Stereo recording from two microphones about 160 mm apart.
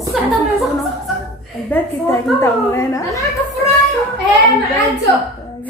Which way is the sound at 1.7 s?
10° left (ahead or behind).